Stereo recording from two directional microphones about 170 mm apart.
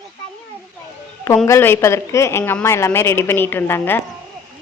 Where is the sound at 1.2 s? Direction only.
15° left (ahead or behind).